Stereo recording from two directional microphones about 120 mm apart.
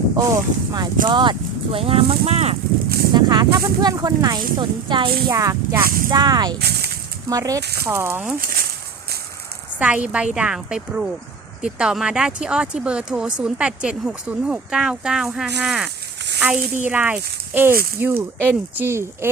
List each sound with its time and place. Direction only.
0.2 s speech: 30° right (ahead or behind); by 2.6 s 60° right (ahead or behind)
3.1 s speech: 35° right (ahead or behind)
5.3 s speech: 25° right (ahead or behind)
7.9 s speech: 20° right (ahead or behind)
9.7 s speech: 10° right (ahead or behind)